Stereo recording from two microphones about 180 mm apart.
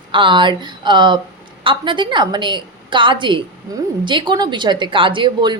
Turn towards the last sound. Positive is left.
turn(degrees=-25)  # may be behind; listen again after turning